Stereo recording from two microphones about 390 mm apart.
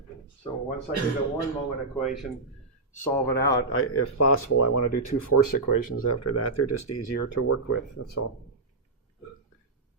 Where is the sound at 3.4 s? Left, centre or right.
Left.